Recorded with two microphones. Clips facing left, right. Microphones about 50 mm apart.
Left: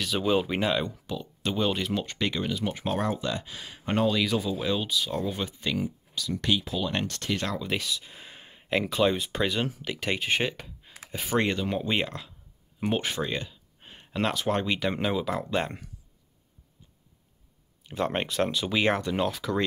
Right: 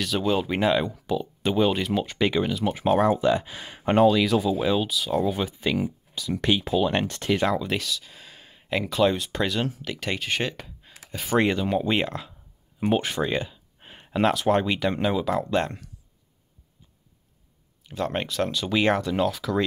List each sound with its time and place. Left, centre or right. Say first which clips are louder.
0.0 s speech: right 1 dB; centre
4.1 s speech: right 5 dB; centre; by 7.2 s right
7.2 s speech: right 10 dB; centre
7.8 s speech: right 1 dB; centre
10.5 s a sound: right 2 dB; centre
11.1 s speech: right 2 dB; centre
11.3 s speech: right 4 dB; centre
13.3 s speech: right 5 dB; centre
17.8 s speech: right 1 dB; centre
18.7 s speech: right 7 dB; centre